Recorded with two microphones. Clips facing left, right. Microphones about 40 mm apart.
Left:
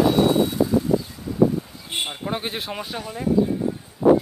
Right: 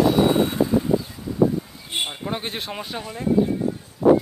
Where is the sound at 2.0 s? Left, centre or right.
Centre.